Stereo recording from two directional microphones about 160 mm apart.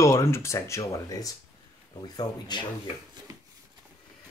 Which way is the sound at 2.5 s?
25° left (ahead or behind).